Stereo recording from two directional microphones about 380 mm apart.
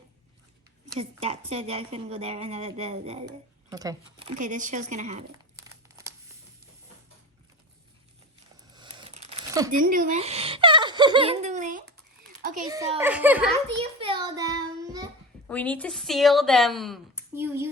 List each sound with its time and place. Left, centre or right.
0.9 s a woman's voice: centre
5.5 s crumpling: centre
8.7 s a sound: centre
9.8 s speech: right
12.4 s a sound: centre
12.6 s speech: centre
14.0 s child singing: centre
15.4 s speech: centre